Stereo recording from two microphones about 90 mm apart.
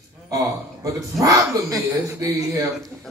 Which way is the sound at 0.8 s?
40° right (ahead or behind).